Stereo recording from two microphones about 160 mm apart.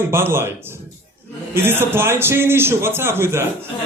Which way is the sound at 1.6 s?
15° right (ahead or behind).